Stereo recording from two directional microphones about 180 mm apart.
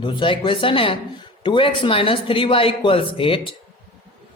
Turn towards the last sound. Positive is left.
turn(degrees=30)  # may be behind; listen again after turning